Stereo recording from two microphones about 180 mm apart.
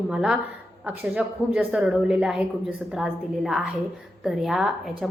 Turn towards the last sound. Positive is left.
turn(degrees=-5)  # may be behind; listen again after turning